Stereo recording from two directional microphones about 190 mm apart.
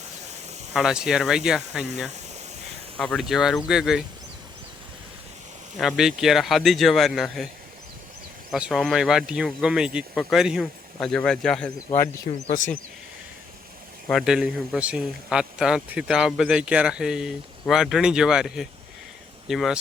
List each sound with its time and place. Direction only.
0.7 s a man's voice: centre (ahead or behind)
5.8 s a man's voice: centre (ahead or behind)
8.5 s a man's voice: centre (ahead or behind)
12.5 s speech: 80° left
14.1 s a man's voice: centre (ahead or behind)